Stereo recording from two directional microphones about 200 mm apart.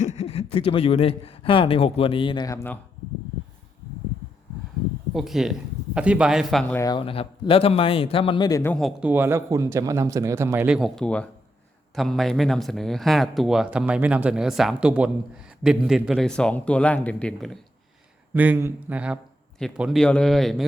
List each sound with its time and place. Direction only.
0.0 s speech: 35° left (ahead or behind); by 2.7 s 15° left (ahead or behind)
5.1 s speech: centre (ahead or behind)
6.7 s a man's voice: 20° left (ahead or behind)
8.7 s a man's voice: centre (ahead or behind)
18.3 s speech: 10° right (ahead or behind)